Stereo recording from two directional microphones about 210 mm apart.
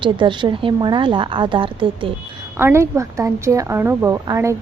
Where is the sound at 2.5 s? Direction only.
10° right (ahead or behind).